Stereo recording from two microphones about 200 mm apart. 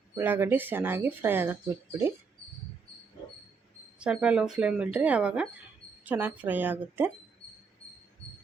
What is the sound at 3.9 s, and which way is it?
Speech, 5° right (ahead or behind).